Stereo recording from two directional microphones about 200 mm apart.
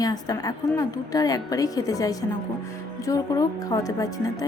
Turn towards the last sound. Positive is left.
turn(degrees=15)  # may be behind; listen again after turning